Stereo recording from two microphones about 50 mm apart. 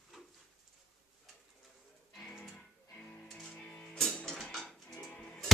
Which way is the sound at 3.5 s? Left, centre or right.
Left.